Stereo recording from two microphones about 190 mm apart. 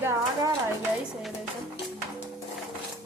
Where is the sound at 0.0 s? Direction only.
15° right (ahead or behind).